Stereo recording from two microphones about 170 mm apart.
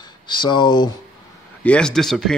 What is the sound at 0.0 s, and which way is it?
Speech, 25° left (ahead or behind).